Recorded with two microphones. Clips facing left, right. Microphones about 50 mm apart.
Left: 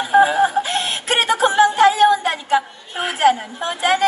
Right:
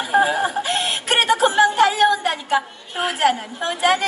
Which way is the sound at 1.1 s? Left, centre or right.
Left.